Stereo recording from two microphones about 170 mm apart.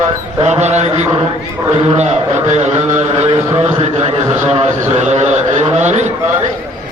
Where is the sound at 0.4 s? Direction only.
40° right (ahead or behind).